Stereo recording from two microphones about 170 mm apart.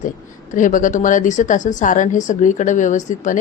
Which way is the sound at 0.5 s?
50° left (ahead or behind).